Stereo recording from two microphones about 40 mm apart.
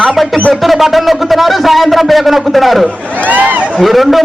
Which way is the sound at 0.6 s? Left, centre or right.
Centre.